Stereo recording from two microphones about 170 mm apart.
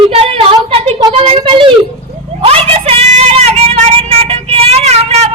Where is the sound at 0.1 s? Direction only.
35° right (ahead or behind).